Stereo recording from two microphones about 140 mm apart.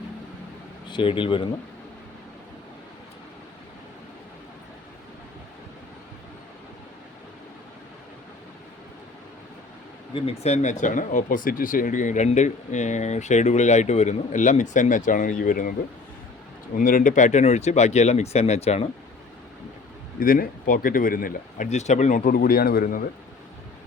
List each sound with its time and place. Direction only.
0.9 s speech: 35° left (ahead or behind)
10.4 s speech: 55° left (ahead or behind); by 15.7 s 75° left (ahead or behind)
16.7 s speech: 75° left (ahead or behind); by 18.9 s 50° left (ahead or behind)
20.1 s speech: 80° left
21.7 s speech: 55° left (ahead or behind); by 23.0 s 90° left